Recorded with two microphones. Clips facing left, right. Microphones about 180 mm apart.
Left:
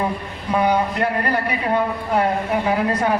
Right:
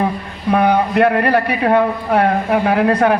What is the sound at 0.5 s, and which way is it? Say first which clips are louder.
A man's voice: right 5 dB; 60° right (ahead or behind).